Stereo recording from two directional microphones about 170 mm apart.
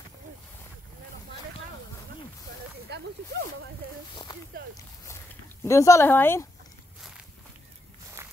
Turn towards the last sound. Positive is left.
turn(degrees=15)  # may be behind; listen again after turning